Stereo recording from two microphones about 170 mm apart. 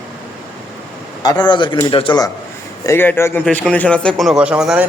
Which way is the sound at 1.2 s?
25° left (ahead or behind).